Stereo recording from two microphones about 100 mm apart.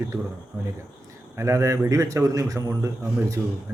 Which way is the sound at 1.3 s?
30° right (ahead or behind).